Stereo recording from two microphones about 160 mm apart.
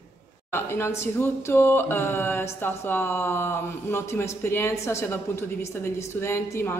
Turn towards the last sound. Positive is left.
turn(degrees=15)  # may be behind; listen again after turning